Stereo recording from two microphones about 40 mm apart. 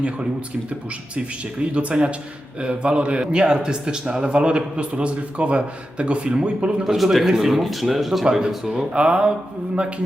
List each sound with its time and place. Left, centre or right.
0.7 s speech: right
6.8 s a man's voice: centre
8.2 s speech: centre